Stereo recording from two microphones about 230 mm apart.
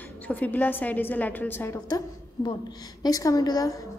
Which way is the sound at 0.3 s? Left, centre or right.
Centre.